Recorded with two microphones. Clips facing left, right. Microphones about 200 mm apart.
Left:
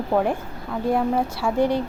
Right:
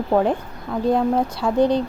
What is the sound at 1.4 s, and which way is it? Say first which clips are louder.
Speech: right 2 dB; 5° right (ahead or behind).